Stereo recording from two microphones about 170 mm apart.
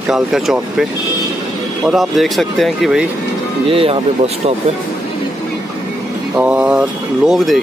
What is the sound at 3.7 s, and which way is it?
Speech, 35° right (ahead or behind).